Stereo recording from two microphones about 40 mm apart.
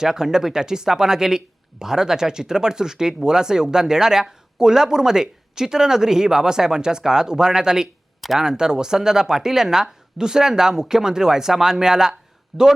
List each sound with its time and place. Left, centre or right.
0.0 s speech: centre
12.5 s speech: centre